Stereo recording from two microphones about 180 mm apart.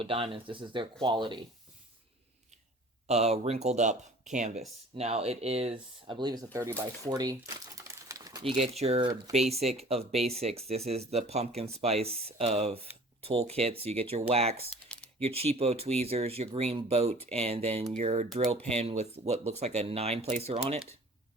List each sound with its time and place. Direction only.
0.0 s speech: 30° right (ahead or behind)
3.1 s speech: 35° right (ahead or behind)
8.5 s speech: 35° right (ahead or behind)